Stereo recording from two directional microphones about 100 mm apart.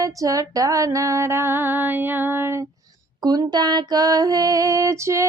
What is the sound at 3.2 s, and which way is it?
Female singing, 45° right (ahead or behind).